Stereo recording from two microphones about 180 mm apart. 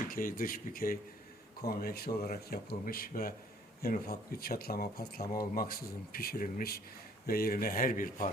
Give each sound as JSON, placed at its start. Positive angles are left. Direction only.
{"t": 0.1, "sound": "speech", "side_deg": 50}